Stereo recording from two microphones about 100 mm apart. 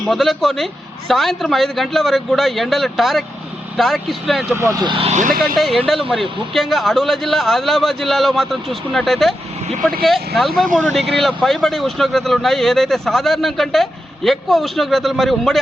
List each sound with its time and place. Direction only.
0.1 s speech: centre (ahead or behind)
4.5 s speech: 25° right (ahead or behind)
5.4 s speech: centre (ahead or behind)